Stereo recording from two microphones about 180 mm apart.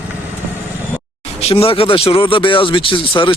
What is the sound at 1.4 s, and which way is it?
Speech, 35° left (ahead or behind).